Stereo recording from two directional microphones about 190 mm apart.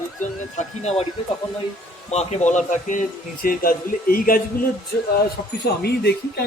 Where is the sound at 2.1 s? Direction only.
35° left (ahead or behind).